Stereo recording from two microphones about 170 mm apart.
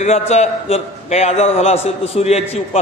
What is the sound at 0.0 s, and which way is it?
A man's voice, 40° left (ahead or behind).